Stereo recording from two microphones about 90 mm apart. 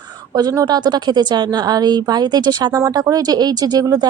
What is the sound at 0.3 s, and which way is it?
A woman's voice, 45° right (ahead or behind).